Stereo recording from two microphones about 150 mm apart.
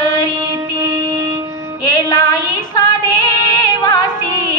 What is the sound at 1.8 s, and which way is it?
Female singing, 25° left (ahead or behind).